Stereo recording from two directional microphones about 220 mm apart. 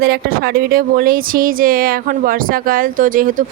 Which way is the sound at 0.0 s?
45° right (ahead or behind).